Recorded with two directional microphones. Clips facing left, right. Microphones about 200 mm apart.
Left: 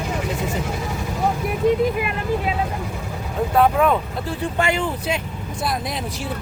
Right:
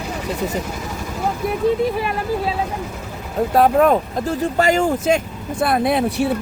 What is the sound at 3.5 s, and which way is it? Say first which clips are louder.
Speech: right 3 dB; 40° right (ahead or behind).